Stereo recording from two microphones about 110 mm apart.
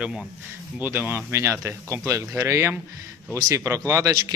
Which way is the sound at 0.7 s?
15° right (ahead or behind).